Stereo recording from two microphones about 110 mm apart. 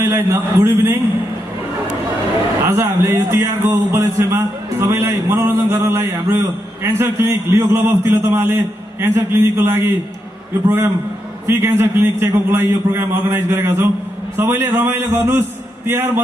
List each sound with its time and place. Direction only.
0.0 s speech: 25° right (ahead or behind)
2.7 s speech: 25° right (ahead or behind)
11.4 s speech: 20° right (ahead or behind)